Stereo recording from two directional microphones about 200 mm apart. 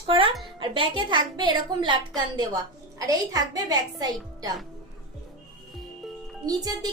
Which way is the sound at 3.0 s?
20° right (ahead or behind).